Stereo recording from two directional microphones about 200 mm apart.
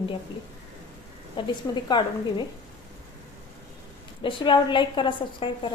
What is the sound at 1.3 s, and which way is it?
A woman's voice, 25° left (ahead or behind).